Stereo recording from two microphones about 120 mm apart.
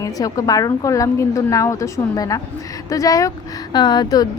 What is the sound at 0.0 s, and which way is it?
Speech, 30° left (ahead or behind).